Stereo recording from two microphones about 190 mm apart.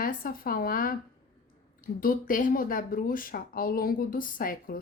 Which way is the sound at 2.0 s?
45° left (ahead or behind).